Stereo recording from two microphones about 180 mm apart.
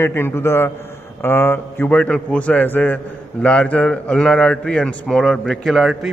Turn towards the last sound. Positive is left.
turn(degrees=0)  # may be behind; listen again after turning